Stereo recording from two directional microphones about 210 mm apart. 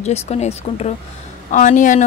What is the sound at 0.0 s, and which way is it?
A woman's voice, 30° left (ahead or behind).